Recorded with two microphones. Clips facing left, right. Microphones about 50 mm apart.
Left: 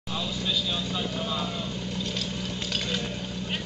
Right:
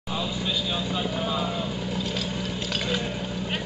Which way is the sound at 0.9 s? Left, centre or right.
Centre.